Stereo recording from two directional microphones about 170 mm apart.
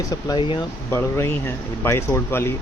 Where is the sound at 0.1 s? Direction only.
25° left (ahead or behind).